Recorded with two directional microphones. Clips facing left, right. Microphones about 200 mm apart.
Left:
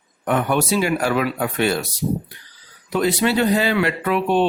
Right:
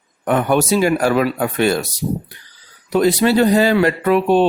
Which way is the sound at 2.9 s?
40° right (ahead or behind).